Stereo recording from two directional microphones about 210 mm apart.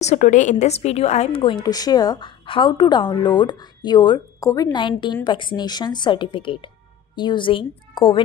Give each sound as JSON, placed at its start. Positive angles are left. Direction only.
{"t": 0.0, "sound": "a woman's voice", "side_deg": 35}